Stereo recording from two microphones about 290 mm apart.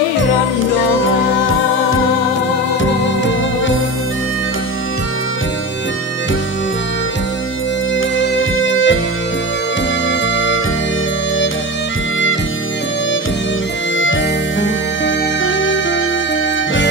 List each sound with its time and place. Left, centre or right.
8.4 s music: left
10.3 s music: left
13.9 s music: left